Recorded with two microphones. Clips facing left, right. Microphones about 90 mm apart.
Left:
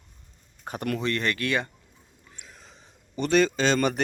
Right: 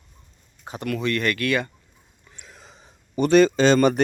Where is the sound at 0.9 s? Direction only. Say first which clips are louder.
Right 5 dB; 25° left (ahead or behind).